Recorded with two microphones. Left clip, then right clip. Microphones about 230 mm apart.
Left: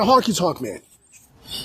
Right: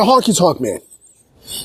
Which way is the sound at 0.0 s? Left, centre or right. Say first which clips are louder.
Right 5 dB; right.